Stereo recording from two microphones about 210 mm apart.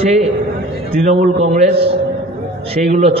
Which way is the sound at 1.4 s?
35° right (ahead or behind).